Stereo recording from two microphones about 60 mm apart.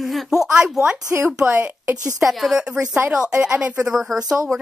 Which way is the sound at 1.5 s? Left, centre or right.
Right.